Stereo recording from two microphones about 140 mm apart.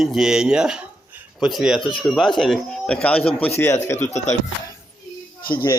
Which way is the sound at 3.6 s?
20° left (ahead or behind).